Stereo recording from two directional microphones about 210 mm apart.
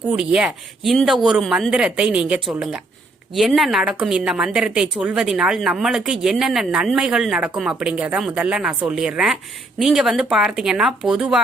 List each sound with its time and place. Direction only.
0.1 s a woman's voice: 5° right (ahead or behind)